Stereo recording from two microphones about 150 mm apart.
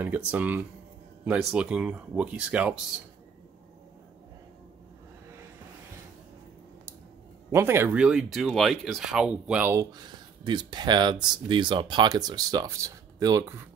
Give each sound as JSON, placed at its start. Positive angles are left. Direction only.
{"t": 0.0, "sound": "speech", "side_deg": -10}
{"t": 7.5, "sound": "speech", "side_deg": -15}
{"t": 9.9, "sound": "speech", "side_deg": -30}